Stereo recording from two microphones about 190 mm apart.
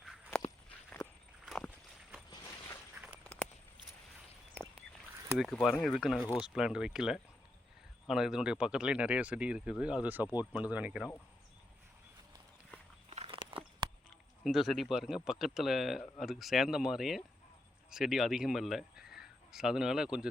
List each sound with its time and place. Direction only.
0.3 s walk: 5° left (ahead or behind)
3.2 s walk: 5° left (ahead or behind)
5.4 s speech: centre (ahead or behind)
13.1 s a sound: 25° right (ahead or behind)
14.4 s a man's voice: centre (ahead or behind)